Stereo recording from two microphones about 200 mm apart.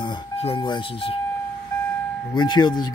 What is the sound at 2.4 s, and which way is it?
Speech, 20° left (ahead or behind).